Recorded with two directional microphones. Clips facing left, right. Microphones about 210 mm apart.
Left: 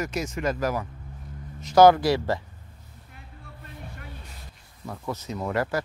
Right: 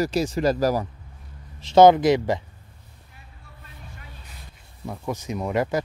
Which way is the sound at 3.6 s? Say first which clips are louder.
Left 4 dB; 60° left (ahead or behind).